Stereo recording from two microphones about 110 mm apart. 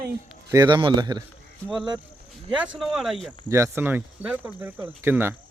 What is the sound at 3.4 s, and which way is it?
Speech, 25° right (ahead or behind).